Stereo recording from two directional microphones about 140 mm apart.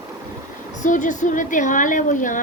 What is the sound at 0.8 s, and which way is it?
A woman's voice, 60° left (ahead or behind).